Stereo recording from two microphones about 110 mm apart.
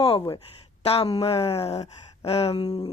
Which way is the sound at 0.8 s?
65° left (ahead or behind).